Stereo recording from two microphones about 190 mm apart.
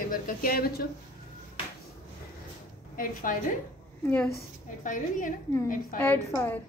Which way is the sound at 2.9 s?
45° left (ahead or behind).